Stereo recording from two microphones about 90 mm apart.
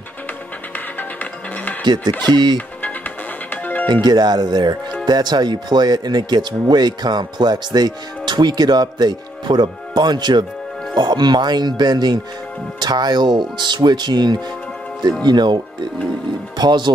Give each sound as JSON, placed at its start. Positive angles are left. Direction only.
{"t": 0.7, "sound": "music", "side_deg": 20}
{"t": 1.8, "sound": "speech", "side_deg": -55}
{"t": 3.8, "sound": "speech", "side_deg": -55}